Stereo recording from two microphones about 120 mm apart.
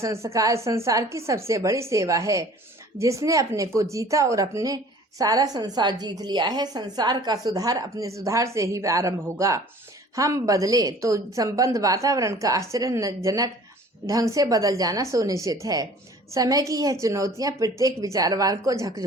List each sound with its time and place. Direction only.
0.0 s a woman's voice: 25° right (ahead or behind)